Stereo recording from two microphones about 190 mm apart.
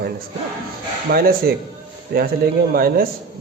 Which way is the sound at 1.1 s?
50° right (ahead or behind).